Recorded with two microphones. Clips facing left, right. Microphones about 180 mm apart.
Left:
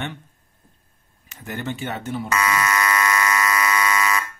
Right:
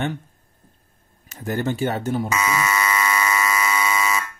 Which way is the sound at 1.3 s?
40° right (ahead or behind).